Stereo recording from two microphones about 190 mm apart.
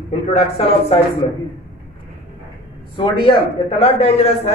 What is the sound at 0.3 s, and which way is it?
Speech, 30° left (ahead or behind).